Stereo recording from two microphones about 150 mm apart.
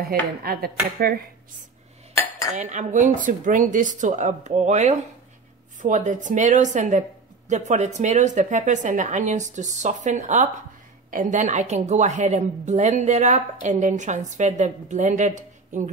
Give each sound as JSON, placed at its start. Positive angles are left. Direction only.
{"t": 0.0, "sound": "chopping", "side_deg": -85}
{"t": 2.1, "sound": "cutlery", "side_deg": 20}
{"t": 2.5, "sound": "a woman's voice", "side_deg": -55}